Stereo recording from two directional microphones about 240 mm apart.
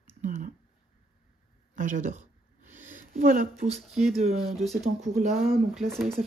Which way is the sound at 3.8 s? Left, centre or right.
Centre.